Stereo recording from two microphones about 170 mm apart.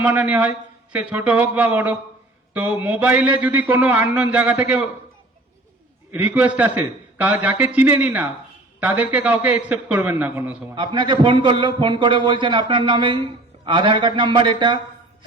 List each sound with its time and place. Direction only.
0.0 s a man's voice: 10° right (ahead or behind)
6.1 s a man's voice: 10° right (ahead or behind)
10.8 s a man's voice: 25° right (ahead or behind)